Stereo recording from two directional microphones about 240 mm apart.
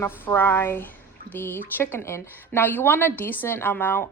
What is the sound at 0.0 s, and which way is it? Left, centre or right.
Speech, centre.